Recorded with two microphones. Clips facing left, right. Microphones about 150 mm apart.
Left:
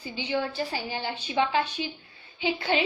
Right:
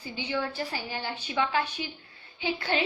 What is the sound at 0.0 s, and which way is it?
A woman's voice, 25° left (ahead or behind).